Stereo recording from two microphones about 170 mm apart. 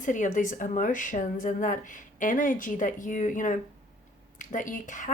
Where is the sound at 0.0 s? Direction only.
50° left (ahead or behind).